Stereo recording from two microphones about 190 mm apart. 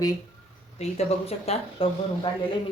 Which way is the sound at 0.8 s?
35° left (ahead or behind).